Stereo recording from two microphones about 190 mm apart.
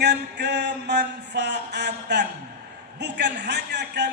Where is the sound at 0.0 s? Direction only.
65° right (ahead or behind).